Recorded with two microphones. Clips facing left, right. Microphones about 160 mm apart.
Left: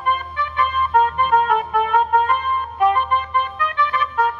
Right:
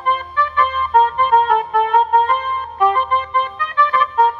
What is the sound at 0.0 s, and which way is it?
Music, 35° right (ahead or behind).